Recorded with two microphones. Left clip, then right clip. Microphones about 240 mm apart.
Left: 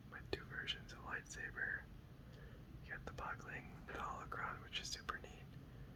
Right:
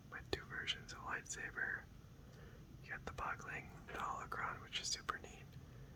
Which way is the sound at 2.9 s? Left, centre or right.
Centre.